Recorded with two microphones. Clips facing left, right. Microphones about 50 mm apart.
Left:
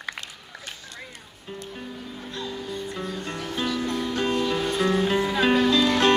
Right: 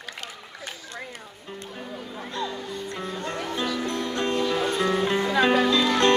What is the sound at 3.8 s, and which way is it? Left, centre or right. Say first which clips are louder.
Music: left 1 dB; centre.